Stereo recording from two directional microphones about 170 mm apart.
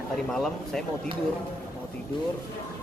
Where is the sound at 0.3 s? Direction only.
5° left (ahead or behind).